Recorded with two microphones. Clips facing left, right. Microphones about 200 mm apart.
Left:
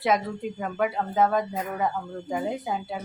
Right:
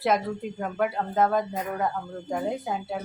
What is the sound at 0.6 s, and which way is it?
A woman's voice, centre (ahead or behind).